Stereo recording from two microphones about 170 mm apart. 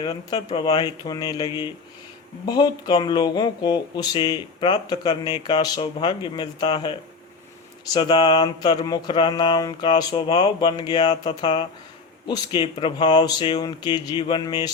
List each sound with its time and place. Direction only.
0.0 s speech: 25° left (ahead or behind)
7.9 s speech: 25° left (ahead or behind)